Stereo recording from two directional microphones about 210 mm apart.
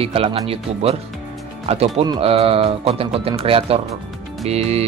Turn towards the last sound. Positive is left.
turn(degrees=-30)  # may be behind; listen again after turning